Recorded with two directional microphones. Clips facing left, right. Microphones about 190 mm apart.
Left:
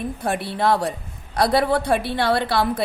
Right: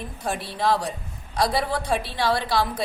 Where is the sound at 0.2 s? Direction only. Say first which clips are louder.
Left 2 dB; 60° left (ahead or behind).